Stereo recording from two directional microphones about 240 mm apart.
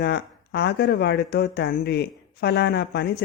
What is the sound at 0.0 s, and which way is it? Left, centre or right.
Speech, left.